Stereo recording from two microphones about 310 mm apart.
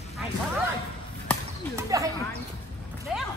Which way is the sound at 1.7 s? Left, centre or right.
Centre.